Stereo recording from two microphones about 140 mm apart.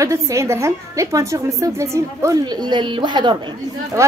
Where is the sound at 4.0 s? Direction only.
20° right (ahead or behind).